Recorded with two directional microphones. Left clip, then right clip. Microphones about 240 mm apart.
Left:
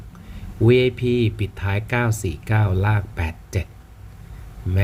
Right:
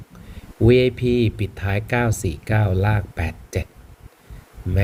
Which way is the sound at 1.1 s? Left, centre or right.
Left.